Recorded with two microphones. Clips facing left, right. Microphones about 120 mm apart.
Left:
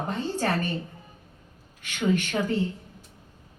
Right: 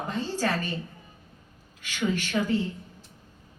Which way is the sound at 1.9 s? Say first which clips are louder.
Left 3 dB; 55° left (ahead or behind).